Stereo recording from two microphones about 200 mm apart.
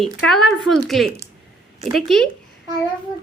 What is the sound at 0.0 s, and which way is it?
A woman's voice, centre (ahead or behind).